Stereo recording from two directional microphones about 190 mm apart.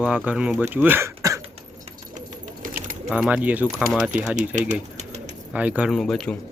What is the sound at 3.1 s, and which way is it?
Speech, 5° right (ahead or behind).